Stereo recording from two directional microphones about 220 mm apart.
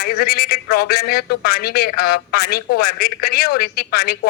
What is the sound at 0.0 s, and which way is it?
A man's voice, 45° left (ahead or behind).